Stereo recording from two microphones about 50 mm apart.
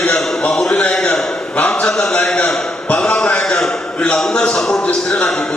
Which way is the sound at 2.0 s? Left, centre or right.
Centre.